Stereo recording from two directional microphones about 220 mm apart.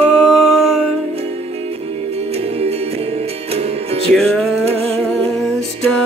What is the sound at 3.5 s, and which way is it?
Music, 25° right (ahead or behind).